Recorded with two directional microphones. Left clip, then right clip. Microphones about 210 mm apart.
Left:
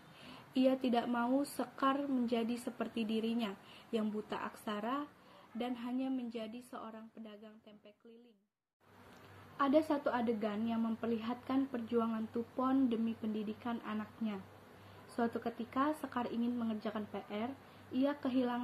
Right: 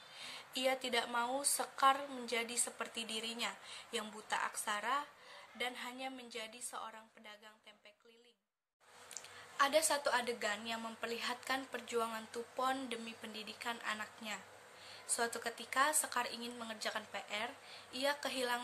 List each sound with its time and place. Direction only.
0.5 s a woman's voice: 15° right (ahead or behind)
9.6 s a woman's voice: 15° right (ahead or behind)
15.4 s a woman's voice: 15° right (ahead or behind)